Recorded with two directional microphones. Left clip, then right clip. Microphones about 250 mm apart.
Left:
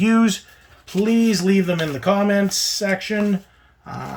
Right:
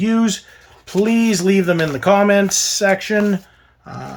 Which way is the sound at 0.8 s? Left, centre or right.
Centre.